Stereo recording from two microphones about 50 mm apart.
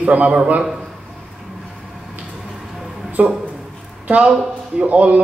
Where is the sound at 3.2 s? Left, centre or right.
Right.